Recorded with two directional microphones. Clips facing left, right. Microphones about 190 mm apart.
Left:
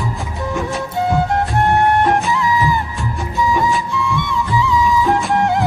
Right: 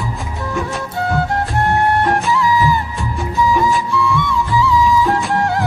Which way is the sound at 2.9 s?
Centre (ahead or behind).